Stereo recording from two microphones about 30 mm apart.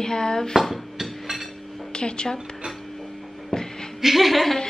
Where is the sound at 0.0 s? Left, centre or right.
Left.